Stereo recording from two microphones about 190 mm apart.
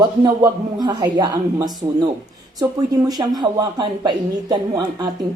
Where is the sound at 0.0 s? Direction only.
20° right (ahead or behind).